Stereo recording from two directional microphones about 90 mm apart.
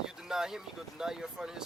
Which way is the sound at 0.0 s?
5° right (ahead or behind).